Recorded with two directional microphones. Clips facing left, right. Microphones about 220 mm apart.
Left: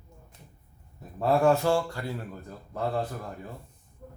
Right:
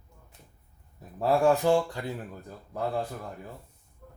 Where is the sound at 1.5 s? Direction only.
15° right (ahead or behind).